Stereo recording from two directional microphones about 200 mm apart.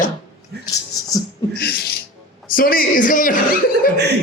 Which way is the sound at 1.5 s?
50° left (ahead or behind).